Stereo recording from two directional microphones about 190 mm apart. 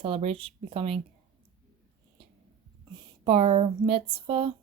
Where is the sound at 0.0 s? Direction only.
30° right (ahead or behind).